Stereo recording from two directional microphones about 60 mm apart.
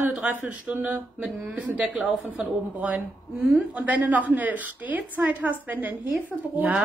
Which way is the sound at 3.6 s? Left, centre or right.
Right.